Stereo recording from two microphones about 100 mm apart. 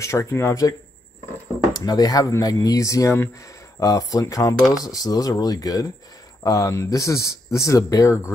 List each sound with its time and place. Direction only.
0.0 s speech: 30° left (ahead or behind)